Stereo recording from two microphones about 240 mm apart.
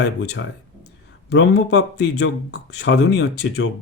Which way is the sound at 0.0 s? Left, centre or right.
Left.